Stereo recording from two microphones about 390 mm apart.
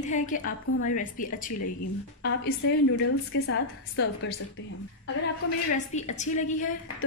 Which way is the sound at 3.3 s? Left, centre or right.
Left.